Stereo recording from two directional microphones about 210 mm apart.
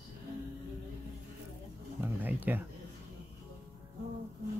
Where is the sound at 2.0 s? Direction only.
10° right (ahead or behind).